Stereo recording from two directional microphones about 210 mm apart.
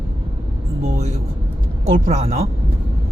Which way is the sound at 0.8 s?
35° right (ahead or behind).